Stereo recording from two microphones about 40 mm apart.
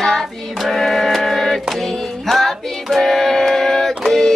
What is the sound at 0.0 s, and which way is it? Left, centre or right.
Female singing, centre.